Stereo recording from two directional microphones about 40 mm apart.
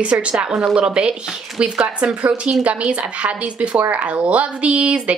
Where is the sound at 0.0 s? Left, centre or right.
Right.